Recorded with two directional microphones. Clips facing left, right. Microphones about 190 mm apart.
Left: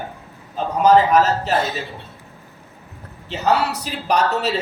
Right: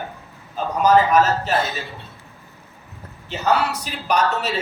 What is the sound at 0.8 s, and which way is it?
Speech, 30° left (ahead or behind).